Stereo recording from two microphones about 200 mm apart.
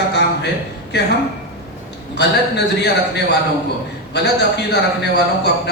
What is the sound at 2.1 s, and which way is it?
Speech, 55° left (ahead or behind).